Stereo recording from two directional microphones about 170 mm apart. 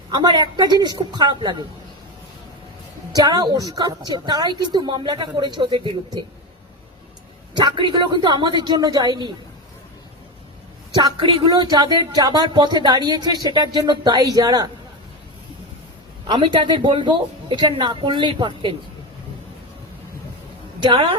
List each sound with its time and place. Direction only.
0.1 s speech: 25° right (ahead or behind)
3.2 s speech: 20° right (ahead or behind)
7.5 s speech: 25° right (ahead or behind)
10.9 s speech: 25° right (ahead or behind)
16.2 s speech: 30° right (ahead or behind)
20.8 s a woman's voice: 30° right (ahead or behind)